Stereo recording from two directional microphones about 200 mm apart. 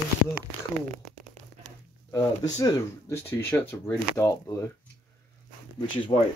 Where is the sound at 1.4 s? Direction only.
30° right (ahead or behind).